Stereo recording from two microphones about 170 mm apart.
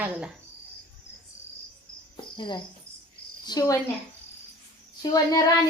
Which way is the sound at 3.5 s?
20° left (ahead or behind).